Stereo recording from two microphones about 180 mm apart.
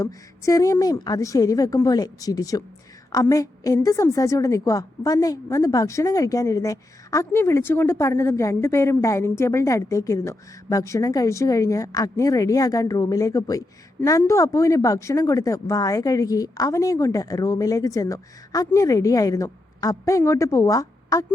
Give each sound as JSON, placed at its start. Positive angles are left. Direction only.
{"t": 0.0, "sound": "a woman's voice", "side_deg": 15}